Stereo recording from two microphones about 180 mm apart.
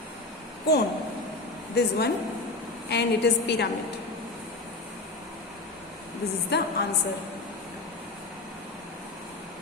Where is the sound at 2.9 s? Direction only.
70° left (ahead or behind).